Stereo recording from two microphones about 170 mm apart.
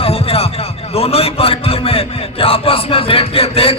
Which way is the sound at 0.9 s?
35° left (ahead or behind).